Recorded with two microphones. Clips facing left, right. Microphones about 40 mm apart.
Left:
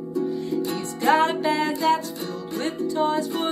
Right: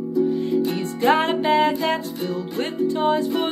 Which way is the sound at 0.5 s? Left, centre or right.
Right.